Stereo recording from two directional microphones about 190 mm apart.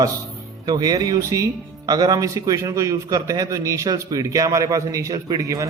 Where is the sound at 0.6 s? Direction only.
20° right (ahead or behind).